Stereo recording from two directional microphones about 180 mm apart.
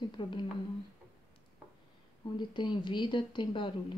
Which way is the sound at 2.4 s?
25° left (ahead or behind).